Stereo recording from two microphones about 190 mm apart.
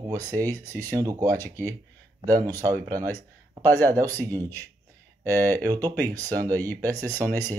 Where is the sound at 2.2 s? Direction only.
20° right (ahead or behind).